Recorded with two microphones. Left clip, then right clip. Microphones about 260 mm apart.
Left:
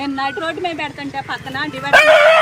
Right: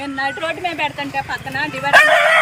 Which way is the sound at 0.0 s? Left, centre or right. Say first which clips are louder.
Left 1 dB; left.